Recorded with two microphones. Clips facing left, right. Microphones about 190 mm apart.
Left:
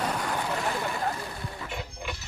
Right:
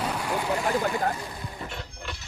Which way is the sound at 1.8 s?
10° left (ahead or behind).